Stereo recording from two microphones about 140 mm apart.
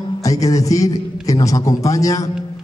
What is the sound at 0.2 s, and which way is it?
A man's voice, 25° left (ahead or behind).